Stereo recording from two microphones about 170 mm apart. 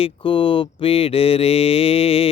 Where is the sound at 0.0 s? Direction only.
30° left (ahead or behind).